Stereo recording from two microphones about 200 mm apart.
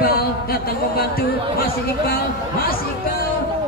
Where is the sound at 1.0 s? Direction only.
50° left (ahead or behind).